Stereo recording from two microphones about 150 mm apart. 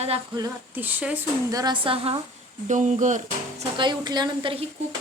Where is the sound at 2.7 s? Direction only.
55° right (ahead or behind).